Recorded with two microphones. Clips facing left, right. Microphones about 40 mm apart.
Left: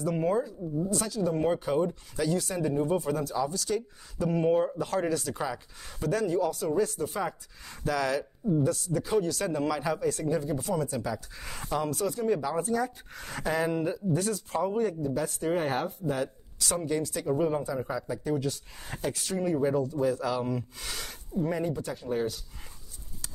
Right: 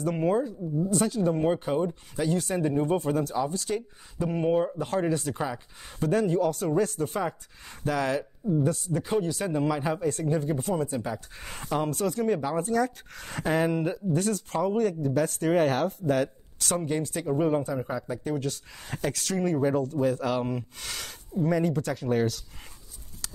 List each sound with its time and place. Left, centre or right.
0.0 s speech: right
1.3 s speech: right
4.7 s speech: right
5.9 s speech: right
7.2 s speech: right
9.8 s speech: right
23.2 s clip-clop: right